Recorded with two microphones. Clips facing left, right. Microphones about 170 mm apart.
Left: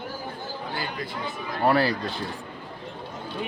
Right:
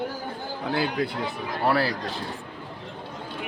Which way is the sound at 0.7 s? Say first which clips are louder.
Right 9 dB; 75° right (ahead or behind).